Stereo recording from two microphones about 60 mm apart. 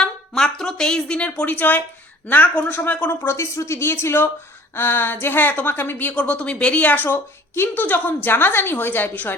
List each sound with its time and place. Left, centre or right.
0.0 s a sound: centre; by 1.8 s left
2.2 s speech: left
3.2 s a woman's voice: left
6.1 s a woman's voice: left